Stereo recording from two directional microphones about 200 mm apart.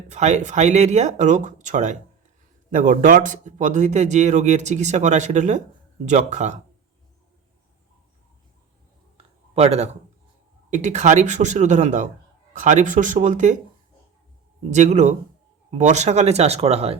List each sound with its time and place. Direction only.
0.1 s speech: 35° right (ahead or behind)
9.6 s speech: 30° right (ahead or behind)
14.6 s speech: 35° right (ahead or behind)